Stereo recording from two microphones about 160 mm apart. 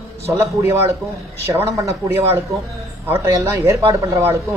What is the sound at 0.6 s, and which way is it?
Speech, 15° right (ahead or behind).